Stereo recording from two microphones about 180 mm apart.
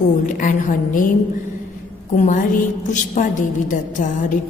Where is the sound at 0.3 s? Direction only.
45° left (ahead or behind).